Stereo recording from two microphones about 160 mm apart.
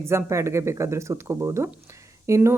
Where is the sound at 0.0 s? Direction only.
15° right (ahead or behind).